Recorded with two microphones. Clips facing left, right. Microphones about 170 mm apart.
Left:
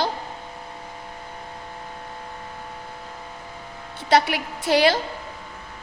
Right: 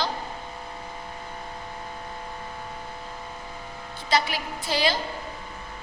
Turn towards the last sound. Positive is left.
turn(degrees=70)  # may be behind; listen again after turning